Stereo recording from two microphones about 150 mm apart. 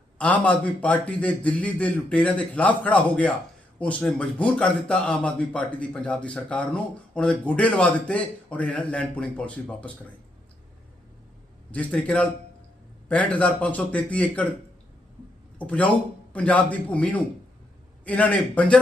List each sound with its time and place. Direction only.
0.2 s a man's voice: 10° left (ahead or behind)
11.7 s a man's voice: 10° left (ahead or behind)
15.5 s a man's voice: 10° left (ahead or behind)